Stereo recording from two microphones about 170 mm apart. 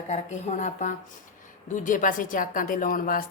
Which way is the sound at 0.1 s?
45° left (ahead or behind).